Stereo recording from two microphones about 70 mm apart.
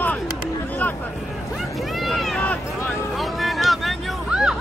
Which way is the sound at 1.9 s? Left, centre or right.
Centre.